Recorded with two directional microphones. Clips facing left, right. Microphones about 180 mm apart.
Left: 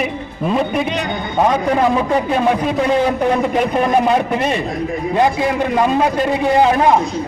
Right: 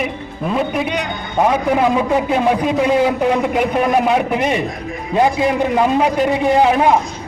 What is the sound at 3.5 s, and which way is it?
A man's voice, 5° right (ahead or behind).